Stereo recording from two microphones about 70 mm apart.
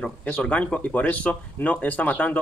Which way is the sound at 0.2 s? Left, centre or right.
Centre.